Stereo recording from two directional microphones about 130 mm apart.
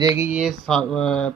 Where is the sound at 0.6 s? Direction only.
5° left (ahead or behind).